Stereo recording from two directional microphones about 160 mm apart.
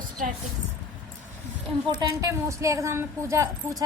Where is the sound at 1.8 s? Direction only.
20° right (ahead or behind).